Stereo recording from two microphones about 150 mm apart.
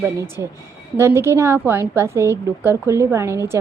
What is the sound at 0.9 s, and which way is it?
A woman's voice, 15° right (ahead or behind).